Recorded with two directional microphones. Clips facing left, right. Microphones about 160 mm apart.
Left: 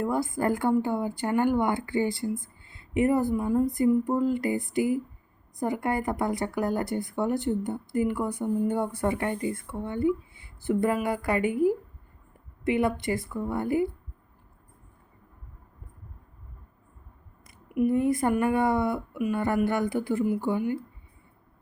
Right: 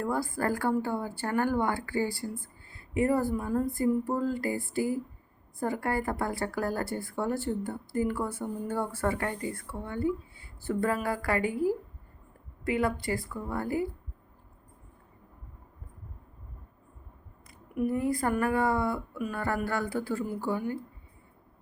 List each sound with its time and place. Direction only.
0.0 s speech: 20° left (ahead or behind)
17.7 s speech: 20° left (ahead or behind)